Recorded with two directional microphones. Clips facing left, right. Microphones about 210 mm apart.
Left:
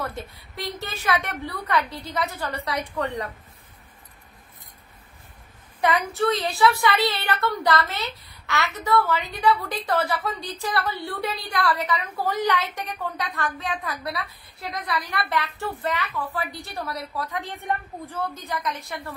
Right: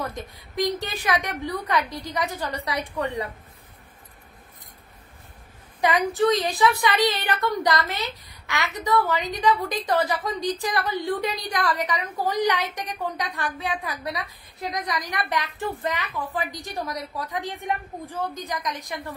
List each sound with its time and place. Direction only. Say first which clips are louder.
0.0 s a woman's voice: even; 15° right (ahead or behind)
5.8 s a woman's voice: right 2 dB; 15° right (ahead or behind)